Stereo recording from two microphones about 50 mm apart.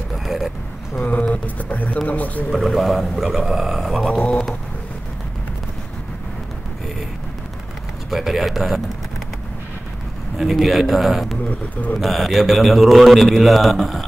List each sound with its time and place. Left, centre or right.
0.1 s vehicle: centre
0.9 s speech: left
2.5 s a man's voice: centre
4.1 s a sound: left
8.1 s a man's voice: centre
10.3 s a man's voice: centre
11.4 s speech: left
12.0 s a man's voice: centre